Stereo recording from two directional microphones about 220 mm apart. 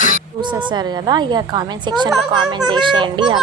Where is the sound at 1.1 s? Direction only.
20° right (ahead or behind).